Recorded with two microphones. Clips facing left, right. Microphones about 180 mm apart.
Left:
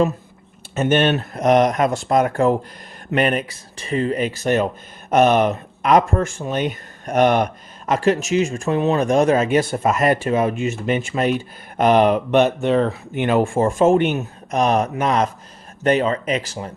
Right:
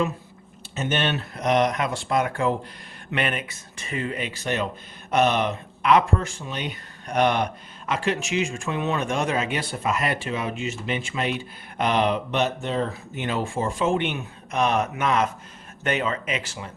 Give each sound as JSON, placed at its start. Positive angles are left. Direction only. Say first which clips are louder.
{"t": 0.8, "sound": "speech", "louder": "left 8 dB", "side_deg": 50}